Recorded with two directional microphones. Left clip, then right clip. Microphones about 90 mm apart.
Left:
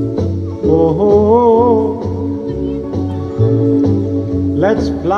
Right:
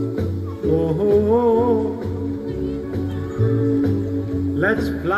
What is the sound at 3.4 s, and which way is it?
Music, 40° left (ahead or behind).